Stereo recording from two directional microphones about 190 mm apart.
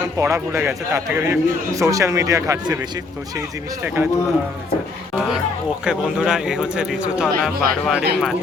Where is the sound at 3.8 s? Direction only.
10° right (ahead or behind).